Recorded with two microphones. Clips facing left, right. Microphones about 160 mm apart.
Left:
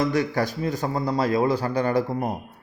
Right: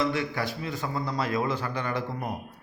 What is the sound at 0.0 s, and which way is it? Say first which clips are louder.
A man's voice: left 5 dB; 40° left (ahead or behind).